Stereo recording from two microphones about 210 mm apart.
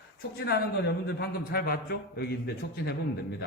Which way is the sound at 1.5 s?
45° left (ahead or behind).